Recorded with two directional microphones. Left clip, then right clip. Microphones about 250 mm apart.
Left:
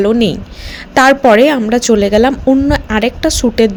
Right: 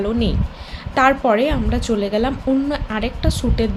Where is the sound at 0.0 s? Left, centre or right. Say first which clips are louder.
Left 10 dB; left.